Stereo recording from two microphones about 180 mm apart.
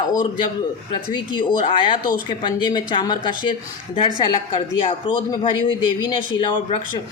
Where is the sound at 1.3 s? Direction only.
25° left (ahead or behind).